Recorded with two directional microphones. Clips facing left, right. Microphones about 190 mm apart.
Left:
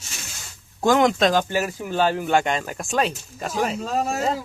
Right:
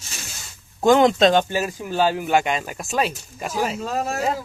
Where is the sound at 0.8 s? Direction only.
25° right (ahead or behind); by 4.3 s centre (ahead or behind).